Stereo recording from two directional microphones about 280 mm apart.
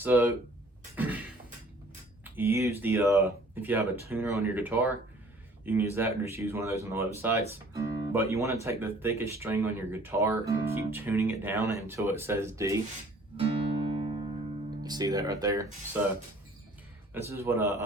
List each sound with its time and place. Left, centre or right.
0.0 s speech: centre
2.2 s speech: centre
13.4 s music: centre
14.8 s speech: centre
17.2 s speech: centre